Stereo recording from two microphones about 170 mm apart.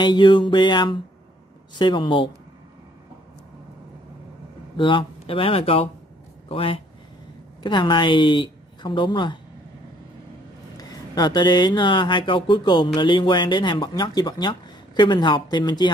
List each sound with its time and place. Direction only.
0.0 s speech: 25° left (ahead or behind)
4.7 s speech: 30° left (ahead or behind)
10.8 s speech: 25° left (ahead or behind)